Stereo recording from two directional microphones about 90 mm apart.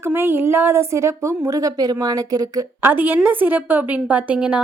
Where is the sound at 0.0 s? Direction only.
30° right (ahead or behind); by 2.6 s 45° right (ahead or behind).